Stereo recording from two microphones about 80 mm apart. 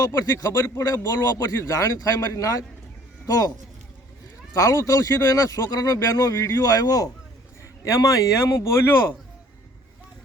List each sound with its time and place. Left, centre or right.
0.3 s speech: left
0.6 s a man's voice: left
1.0 s speech: left
4.5 s speech: left
7.6 s a man's voice: left